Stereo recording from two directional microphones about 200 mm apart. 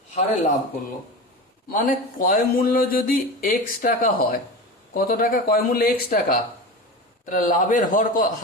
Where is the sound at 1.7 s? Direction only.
45° left (ahead or behind).